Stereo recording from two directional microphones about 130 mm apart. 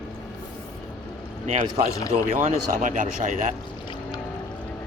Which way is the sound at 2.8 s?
85° right.